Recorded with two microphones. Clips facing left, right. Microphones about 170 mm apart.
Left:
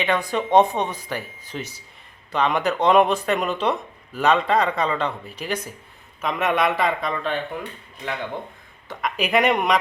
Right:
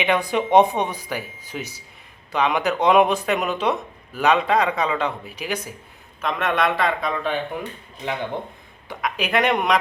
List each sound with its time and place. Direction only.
0.0 s speech: 15° right (ahead or behind)
6.2 s a man's voice: 5° left (ahead or behind)
7.0 s speech: 5° right (ahead or behind)
8.0 s speech: 20° right (ahead or behind)
9.0 s speech: centre (ahead or behind)